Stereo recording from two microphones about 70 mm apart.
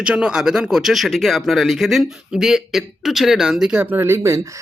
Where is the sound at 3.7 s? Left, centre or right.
Right.